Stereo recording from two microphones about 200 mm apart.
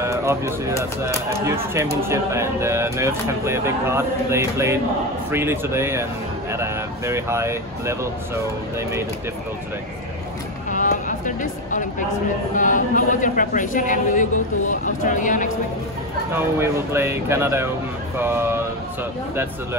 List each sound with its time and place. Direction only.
0.0 s speech: 15° right (ahead or behind)
10.7 s a sound: 40° left (ahead or behind)
12.5 s a man's voice: 40° left (ahead or behind)
16.3 s speech: 10° right (ahead or behind)